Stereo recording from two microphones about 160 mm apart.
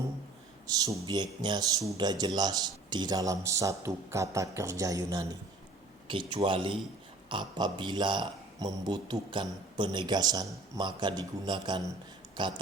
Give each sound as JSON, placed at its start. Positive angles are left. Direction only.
{"t": 0.7, "sound": "a man's voice", "side_deg": -25}
{"t": 6.1, "sound": "a man's voice", "side_deg": -30}